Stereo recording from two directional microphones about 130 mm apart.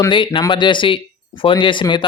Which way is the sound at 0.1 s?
40° left (ahead or behind).